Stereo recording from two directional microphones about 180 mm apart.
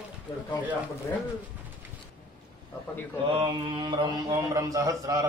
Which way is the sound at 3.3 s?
25° right (ahead or behind).